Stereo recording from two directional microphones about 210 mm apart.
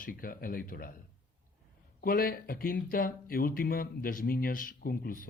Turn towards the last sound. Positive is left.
turn(degrees=45)  # may be behind; listen again after turning